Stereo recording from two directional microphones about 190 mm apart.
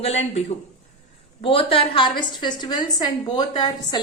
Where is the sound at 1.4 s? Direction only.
30° left (ahead or behind).